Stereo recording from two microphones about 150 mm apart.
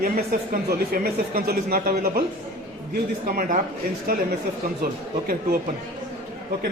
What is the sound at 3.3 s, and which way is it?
Speech, 65° right (ahead or behind).